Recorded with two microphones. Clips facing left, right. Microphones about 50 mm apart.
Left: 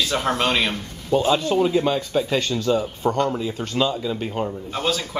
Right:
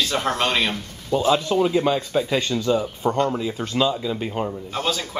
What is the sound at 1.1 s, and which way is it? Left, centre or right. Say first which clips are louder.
Speech: even; left.